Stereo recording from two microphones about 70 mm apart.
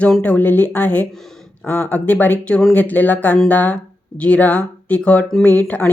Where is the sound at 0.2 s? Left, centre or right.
Left.